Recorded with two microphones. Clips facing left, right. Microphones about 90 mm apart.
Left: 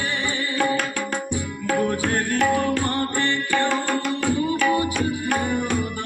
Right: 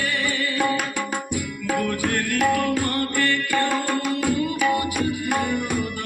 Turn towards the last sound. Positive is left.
turn(degrees=30)  # may be behind; listen again after turning